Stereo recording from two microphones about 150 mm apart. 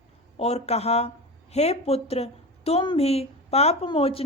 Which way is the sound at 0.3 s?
45° left (ahead or behind).